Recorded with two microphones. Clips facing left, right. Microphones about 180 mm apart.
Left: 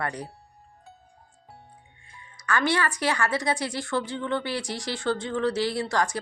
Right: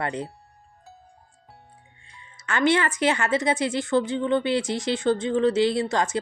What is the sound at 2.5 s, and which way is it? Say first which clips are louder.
A woman's voice: right 3 dB; 20° right (ahead or behind).